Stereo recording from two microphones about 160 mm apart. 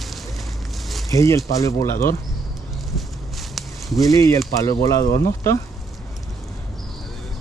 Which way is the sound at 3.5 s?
Centre (ahead or behind).